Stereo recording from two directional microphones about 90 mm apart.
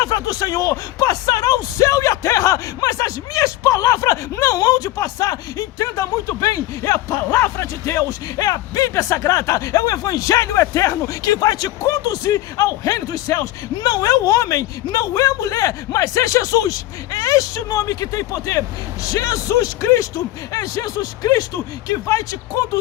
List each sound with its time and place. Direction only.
0.0 s speech: 45° left (ahead or behind)